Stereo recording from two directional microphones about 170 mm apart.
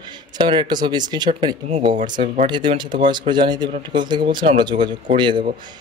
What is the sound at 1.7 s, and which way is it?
Speech, 40° right (ahead or behind).